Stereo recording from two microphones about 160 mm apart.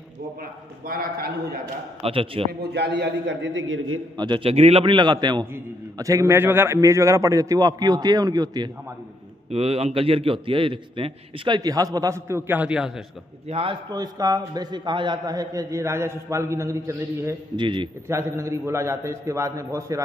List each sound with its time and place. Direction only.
0.8 s a man's voice: 70° right (ahead or behind)
2.0 s a man's voice: 35° right (ahead or behind)
2.6 s a man's voice: 90° right
4.2 s a man's voice: 30° right (ahead or behind)
9.5 s a man's voice: 40° right (ahead or behind); by 13.0 s 5° right (ahead or behind)
13.5 s a man's voice: 35° right (ahead or behind)
13.9 s a man's voice: 25° right (ahead or behind)
17.6 s a man's voice: 30° right (ahead or behind)
18.0 s a man's voice: 15° right (ahead or behind)